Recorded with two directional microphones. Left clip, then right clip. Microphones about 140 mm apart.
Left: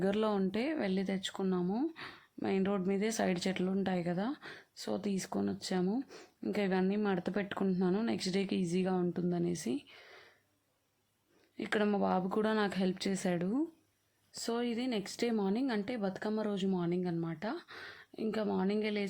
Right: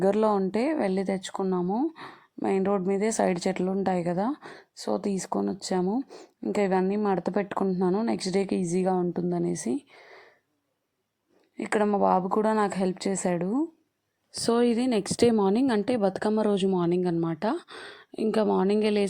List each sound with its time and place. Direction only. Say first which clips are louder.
0.0 s a woman's voice: right 9 dB; 35° right (ahead or behind)
6.5 s a woman's voice: right 9 dB; 30° right (ahead or behind)
11.5 s a woman's voice: right 8 dB; 30° right (ahead or behind)
14.3 s a woman's voice: right 12 dB; 60° right (ahead or behind)